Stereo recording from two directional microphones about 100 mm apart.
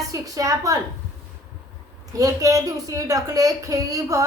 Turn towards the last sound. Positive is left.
turn(degrees=-35)  # may be behind; listen again after turning